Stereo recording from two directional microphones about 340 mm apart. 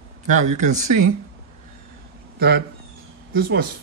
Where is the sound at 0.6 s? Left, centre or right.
Right.